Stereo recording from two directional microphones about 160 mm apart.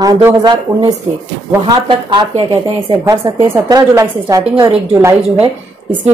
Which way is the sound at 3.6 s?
25° right (ahead or behind).